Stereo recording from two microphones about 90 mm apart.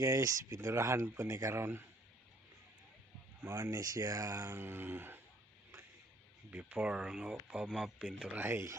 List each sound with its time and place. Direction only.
0.0 s speech: 40° right (ahead or behind)
3.4 s speech: 35° right (ahead or behind)
6.5 s speech: 15° right (ahead or behind)
8.4 s speech: 25° right (ahead or behind)